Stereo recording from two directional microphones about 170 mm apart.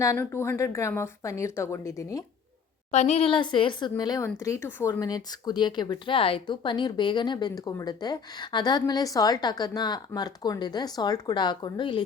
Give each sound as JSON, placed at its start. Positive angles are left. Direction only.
{"t": 0.0, "sound": "speech", "side_deg": 15}
{"t": 2.9, "sound": "speech", "side_deg": 40}